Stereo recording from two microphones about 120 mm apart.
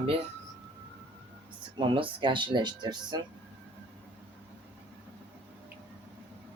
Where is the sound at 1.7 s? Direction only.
45° right (ahead or behind).